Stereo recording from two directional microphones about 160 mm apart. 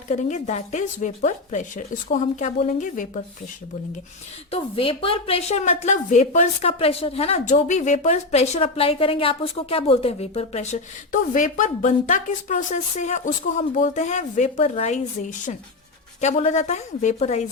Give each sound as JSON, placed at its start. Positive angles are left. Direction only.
{"t": 0.1, "sound": "a woman's voice", "side_deg": 45}
{"t": 4.5, "sound": "a woman's voice", "side_deg": 35}